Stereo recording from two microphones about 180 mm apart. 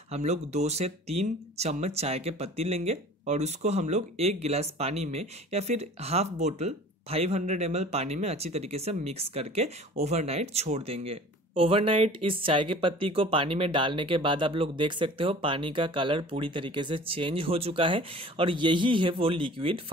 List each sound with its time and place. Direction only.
0.1 s speech: 40° right (ahead or behind)